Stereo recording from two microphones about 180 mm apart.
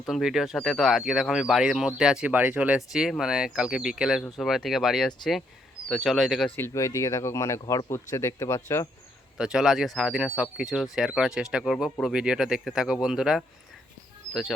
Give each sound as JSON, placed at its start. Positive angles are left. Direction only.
{"t": 0.1, "sound": "speech", "side_deg": 0}
{"t": 6.6, "sound": "speech", "side_deg": 15}
{"t": 9.4, "sound": "speech", "side_deg": -5}